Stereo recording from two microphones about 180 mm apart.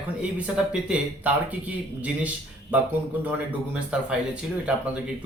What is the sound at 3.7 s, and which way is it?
A man's voice, 5° right (ahead or behind).